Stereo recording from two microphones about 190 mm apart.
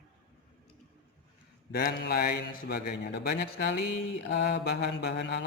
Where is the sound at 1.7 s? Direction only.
55° left (ahead or behind).